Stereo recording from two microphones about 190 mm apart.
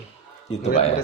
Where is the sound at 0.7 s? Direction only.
35° left (ahead or behind).